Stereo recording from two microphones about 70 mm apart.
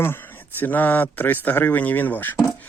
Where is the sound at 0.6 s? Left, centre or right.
Left.